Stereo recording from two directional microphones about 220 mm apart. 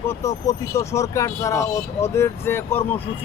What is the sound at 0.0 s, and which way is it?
Speech, 10° left (ahead or behind).